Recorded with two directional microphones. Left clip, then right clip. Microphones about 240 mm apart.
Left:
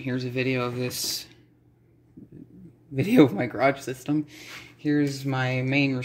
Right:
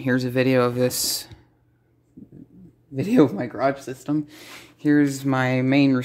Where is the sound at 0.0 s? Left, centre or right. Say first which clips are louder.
Right 7 dB; right.